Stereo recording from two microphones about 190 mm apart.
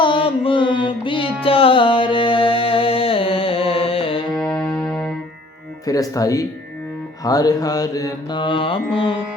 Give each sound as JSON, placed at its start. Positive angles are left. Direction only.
{"t": 0.0, "sound": "music", "side_deg": 25}
{"t": 4.4, "sound": "music", "side_deg": 0}
{"t": 5.8, "sound": "speech", "side_deg": 20}
{"t": 7.3, "sound": "mantra", "side_deg": 20}